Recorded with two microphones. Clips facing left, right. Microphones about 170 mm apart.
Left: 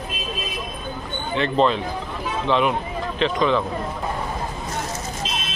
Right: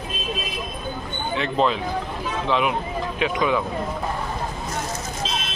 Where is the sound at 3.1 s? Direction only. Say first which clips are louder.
Left 2 dB; 10° right (ahead or behind).